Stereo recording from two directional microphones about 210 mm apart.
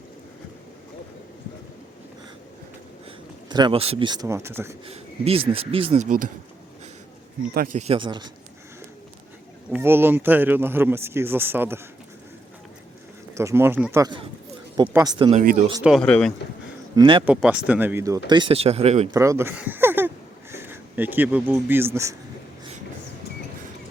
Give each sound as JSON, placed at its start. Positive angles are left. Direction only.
{"t": 3.5, "sound": "speech", "side_deg": -25}
{"t": 4.9, "sound": "speech", "side_deg": -30}
{"t": 7.5, "sound": "speech", "side_deg": -45}
{"t": 7.9, "sound": "speech", "side_deg": -25}
{"t": 9.7, "sound": "speech", "side_deg": -10}
{"t": 13.3, "sound": "speech", "side_deg": -15}
{"t": 15.3, "sound": "speech", "side_deg": -35}
{"t": 15.8, "sound": "speech", "side_deg": 0}
{"t": 16.9, "sound": "speech", "side_deg": -25}
{"t": 17.2, "sound": "speech", "side_deg": -5}
{"t": 19.1, "sound": "speech", "side_deg": -15}